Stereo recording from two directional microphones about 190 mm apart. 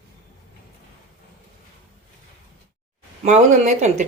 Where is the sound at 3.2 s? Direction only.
40° right (ahead or behind).